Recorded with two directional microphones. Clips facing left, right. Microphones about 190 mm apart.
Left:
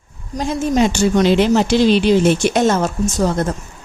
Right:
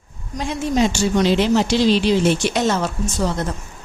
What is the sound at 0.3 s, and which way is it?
Speech, 40° left (ahead or behind).